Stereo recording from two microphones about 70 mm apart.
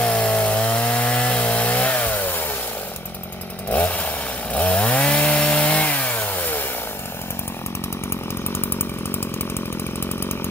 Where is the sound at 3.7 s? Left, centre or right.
Left.